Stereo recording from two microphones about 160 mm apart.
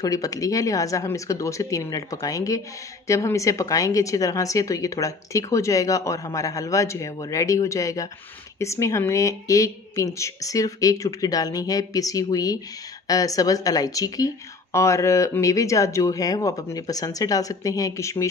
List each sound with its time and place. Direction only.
0.0 s a woman's voice: 20° left (ahead or behind)